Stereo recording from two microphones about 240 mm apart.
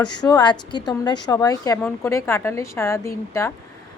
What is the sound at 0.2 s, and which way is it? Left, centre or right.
A woman's voice, centre.